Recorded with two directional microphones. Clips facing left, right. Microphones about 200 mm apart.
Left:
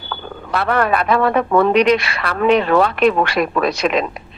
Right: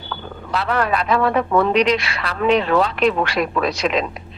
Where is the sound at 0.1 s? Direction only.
60° left (ahead or behind).